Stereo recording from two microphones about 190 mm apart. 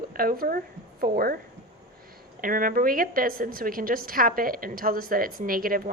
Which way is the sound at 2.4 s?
45° right (ahead or behind).